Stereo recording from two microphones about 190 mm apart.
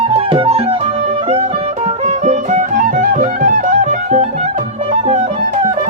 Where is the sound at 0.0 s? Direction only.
30° right (ahead or behind).